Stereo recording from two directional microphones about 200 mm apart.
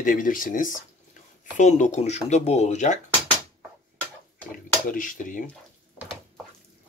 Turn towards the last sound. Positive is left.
turn(degrees=40)  # may be behind; listen again after turning